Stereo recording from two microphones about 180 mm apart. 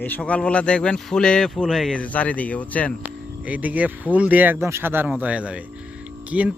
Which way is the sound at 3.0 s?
10° right (ahead or behind).